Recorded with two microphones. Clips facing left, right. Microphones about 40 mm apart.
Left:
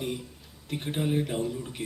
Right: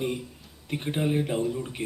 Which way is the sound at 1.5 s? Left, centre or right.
Right.